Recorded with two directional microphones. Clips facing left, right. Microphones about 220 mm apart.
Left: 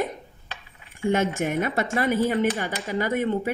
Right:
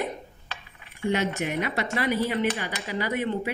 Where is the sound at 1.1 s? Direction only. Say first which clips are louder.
Left 3 dB; 50° left (ahead or behind).